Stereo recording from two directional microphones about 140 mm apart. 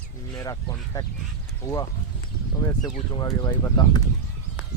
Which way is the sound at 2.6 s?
30° left (ahead or behind).